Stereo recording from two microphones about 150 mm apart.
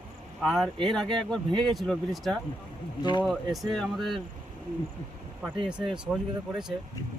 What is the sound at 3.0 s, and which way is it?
Speech, 30° left (ahead or behind).